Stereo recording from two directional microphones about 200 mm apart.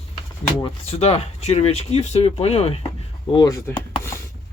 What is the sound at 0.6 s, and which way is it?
Speech, 30° left (ahead or behind).